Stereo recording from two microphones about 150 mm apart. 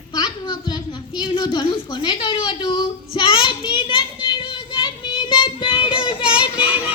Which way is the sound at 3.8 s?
35° left (ahead or behind).